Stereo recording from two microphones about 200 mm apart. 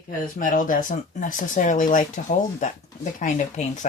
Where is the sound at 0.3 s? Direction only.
40° left (ahead or behind).